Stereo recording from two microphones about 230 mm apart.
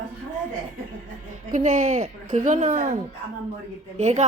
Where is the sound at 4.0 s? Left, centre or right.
Right.